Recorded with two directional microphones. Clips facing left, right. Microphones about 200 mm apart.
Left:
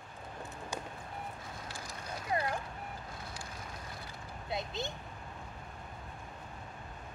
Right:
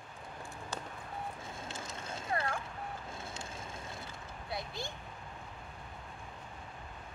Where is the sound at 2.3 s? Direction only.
20° left (ahead or behind).